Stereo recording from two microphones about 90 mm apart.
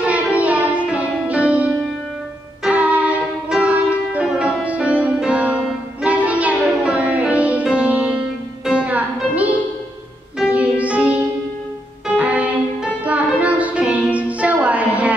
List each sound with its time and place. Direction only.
0.0 s music: 15° right (ahead or behind)
2.6 s music: 15° right (ahead or behind)